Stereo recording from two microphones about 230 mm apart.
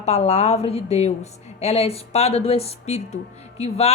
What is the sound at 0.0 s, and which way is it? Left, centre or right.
A woman's voice, left.